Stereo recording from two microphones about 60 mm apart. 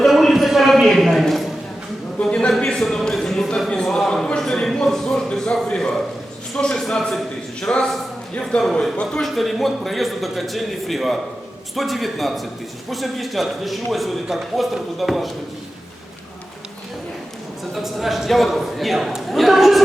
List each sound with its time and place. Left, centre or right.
0.0 s a sound: centre
2.2 s a sound: centre
2.7 s speech: centre
7.7 s a man's voice: left
9.2 s speech: centre
17.8 s speech: centre